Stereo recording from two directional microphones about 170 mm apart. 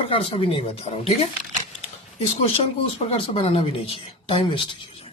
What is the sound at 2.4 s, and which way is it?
Speech, 35° left (ahead or behind).